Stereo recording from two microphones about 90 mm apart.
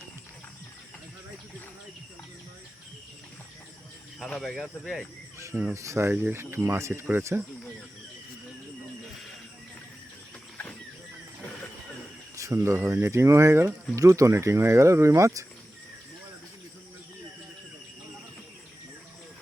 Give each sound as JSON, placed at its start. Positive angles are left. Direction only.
{"t": 4.3, "sound": "speech", "side_deg": 5}
{"t": 5.7, "sound": "speech", "side_deg": -35}
{"t": 12.4, "sound": "speech", "side_deg": -30}